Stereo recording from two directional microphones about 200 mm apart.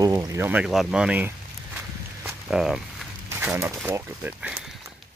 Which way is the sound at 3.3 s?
10° right (ahead or behind).